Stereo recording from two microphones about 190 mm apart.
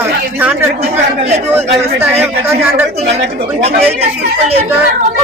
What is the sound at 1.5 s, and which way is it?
Speech, 10° right (ahead or behind).